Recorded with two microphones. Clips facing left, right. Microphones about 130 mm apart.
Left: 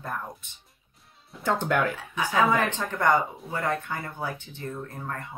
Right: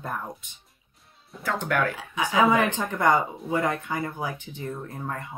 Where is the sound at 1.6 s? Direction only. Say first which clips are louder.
Right 1 dB; 20° left (ahead or behind).